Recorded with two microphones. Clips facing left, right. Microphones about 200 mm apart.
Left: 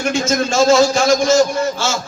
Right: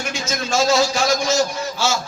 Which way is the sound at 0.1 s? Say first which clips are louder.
Left 6 dB; 50° left (ahead or behind).